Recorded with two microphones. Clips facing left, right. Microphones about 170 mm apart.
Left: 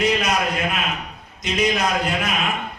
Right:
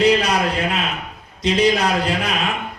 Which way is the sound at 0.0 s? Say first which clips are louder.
Right 4 dB; 30° right (ahead or behind).